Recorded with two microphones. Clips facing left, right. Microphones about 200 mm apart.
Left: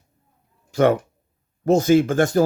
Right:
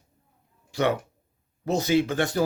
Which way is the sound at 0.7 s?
45° left (ahead or behind).